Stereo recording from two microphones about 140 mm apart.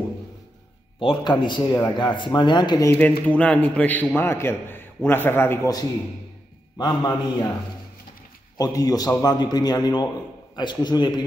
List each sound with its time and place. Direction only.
0.9 s a man's voice: 40° left (ahead or behind)
2.9 s a man's voice: 10° left (ahead or behind); by 7.5 s 30° left (ahead or behind)
8.5 s a man's voice: 30° left (ahead or behind)